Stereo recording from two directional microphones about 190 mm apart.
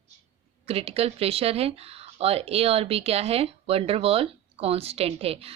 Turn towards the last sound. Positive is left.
turn(degrees=-30)  # may be behind; listen again after turning